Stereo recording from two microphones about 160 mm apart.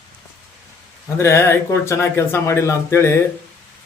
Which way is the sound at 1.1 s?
15° left (ahead or behind).